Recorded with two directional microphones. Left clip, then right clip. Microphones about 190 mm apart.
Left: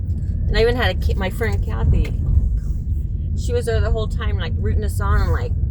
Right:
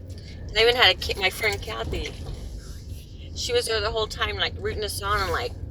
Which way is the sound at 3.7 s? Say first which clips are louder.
Even; 20° left (ahead or behind).